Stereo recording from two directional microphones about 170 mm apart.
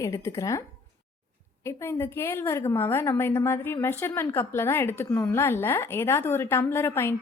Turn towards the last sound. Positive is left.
turn(degrees=15)  # may be behind; listen again after turning